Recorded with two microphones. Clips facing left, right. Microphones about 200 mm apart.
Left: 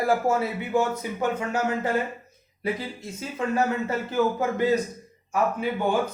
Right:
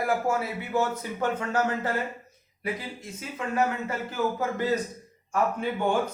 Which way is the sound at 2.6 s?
30° left (ahead or behind).